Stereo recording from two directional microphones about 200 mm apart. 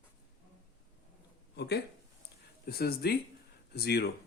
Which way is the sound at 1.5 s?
55° left (ahead or behind).